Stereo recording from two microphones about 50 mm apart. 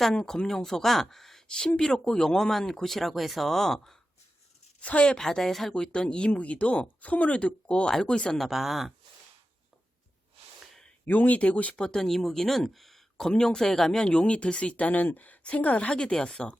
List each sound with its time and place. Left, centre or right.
0.2 s speech: centre
4.8 s speech: left
5.2 s speech: centre
5.7 s speech: centre
8.4 s speech: centre
11.0 s speech: left
11.8 s speech: centre